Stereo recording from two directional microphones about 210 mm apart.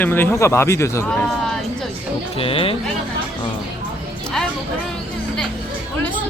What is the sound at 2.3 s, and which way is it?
Speech, 25° left (ahead or behind).